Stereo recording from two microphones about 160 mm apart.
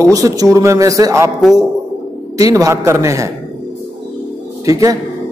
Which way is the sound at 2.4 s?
20° right (ahead or behind).